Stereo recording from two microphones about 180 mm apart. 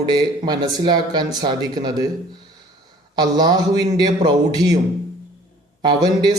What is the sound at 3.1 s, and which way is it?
Speech, 20° right (ahead or behind).